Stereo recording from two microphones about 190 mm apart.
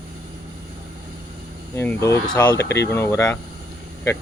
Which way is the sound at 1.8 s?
15° left (ahead or behind).